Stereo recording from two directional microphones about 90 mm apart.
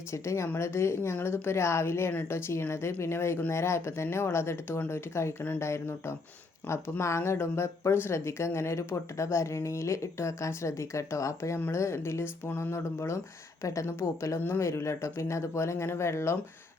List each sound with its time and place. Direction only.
0.1 s a woman's voice: 35° left (ahead or behind)